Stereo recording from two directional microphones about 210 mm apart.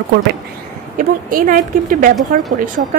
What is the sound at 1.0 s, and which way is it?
Speech, 40° right (ahead or behind).